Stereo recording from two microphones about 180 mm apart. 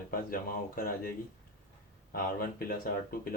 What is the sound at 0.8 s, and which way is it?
Speech, 55° left (ahead or behind).